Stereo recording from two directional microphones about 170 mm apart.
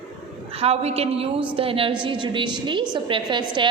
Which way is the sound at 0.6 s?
35° right (ahead or behind).